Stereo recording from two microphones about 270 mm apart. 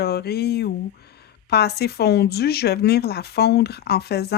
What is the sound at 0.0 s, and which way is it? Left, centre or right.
Speech, left.